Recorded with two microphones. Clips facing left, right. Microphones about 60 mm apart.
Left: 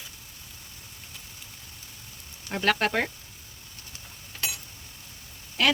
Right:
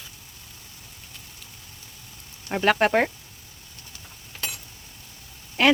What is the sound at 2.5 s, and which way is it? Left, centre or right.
Speech, right.